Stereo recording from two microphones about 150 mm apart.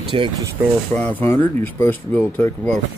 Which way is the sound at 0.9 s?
10° left (ahead or behind).